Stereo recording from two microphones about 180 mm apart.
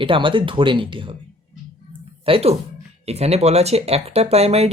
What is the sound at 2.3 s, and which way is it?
Speech, 30° right (ahead or behind).